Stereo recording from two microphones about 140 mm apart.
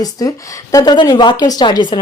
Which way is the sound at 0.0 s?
25° left (ahead or behind).